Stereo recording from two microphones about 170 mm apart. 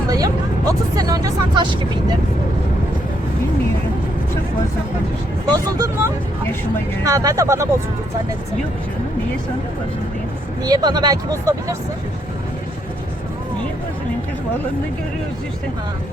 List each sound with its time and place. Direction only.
0.1 s speech: 20° right (ahead or behind)
5.5 s speech: 25° right (ahead or behind)
10.6 s speech: 25° right (ahead or behind)